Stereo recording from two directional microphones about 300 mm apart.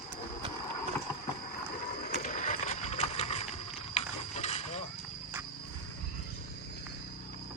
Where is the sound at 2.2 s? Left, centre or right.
Left.